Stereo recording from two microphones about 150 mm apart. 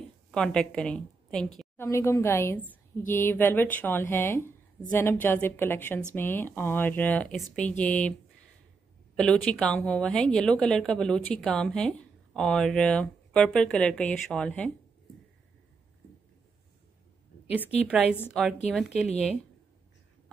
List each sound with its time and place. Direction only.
0.3 s a woman's voice: 5° left (ahead or behind)
1.8 s a woman's voice: 15° left (ahead or behind)
9.1 s a woman's voice: 5° left (ahead or behind)
18.3 s a woman's voice: 5° right (ahead or behind)